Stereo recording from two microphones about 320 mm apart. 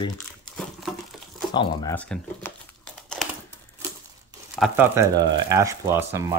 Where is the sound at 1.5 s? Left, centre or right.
Centre.